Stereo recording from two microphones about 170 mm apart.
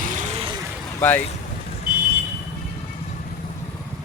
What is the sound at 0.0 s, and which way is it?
Vehicle, 50° right (ahead or behind).